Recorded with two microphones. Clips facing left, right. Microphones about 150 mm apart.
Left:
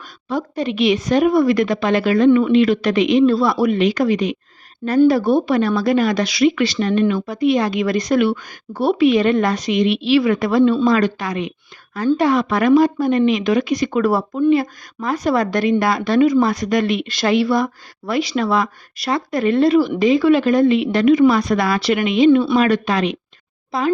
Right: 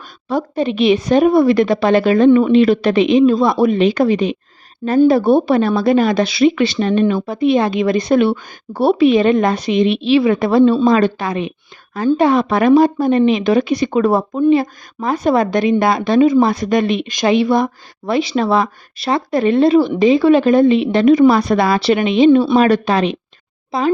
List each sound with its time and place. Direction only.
0.5 s speech: 25° right (ahead or behind)
4.8 s a woman's voice: 10° right (ahead or behind)
5.3 s speech: 30° right (ahead or behind)